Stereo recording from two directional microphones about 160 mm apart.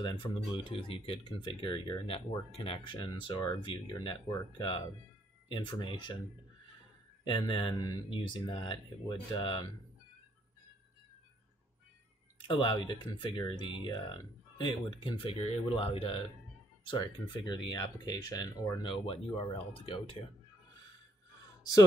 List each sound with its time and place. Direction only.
0.0 s speech: 30° left (ahead or behind)
7.2 s speech: 30° left (ahead or behind)
12.4 s speech: 30° left (ahead or behind)